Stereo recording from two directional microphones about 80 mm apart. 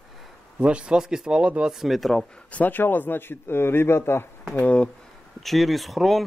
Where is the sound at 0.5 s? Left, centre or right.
Centre.